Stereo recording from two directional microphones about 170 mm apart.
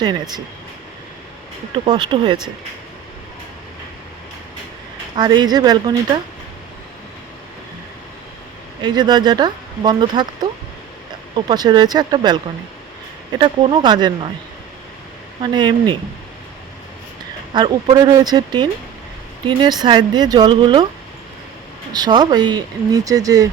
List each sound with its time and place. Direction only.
0.0 s speech: 25° right (ahead or behind)
1.7 s speech: 30° right (ahead or behind)
5.1 s speech: 25° right (ahead or behind)
8.8 s speech: 25° right (ahead or behind)
13.4 s speech: 30° right (ahead or behind)
15.4 s speech: 25° right (ahead or behind)
17.5 s speech: 25° right (ahead or behind)
21.9 s speech: 25° right (ahead or behind)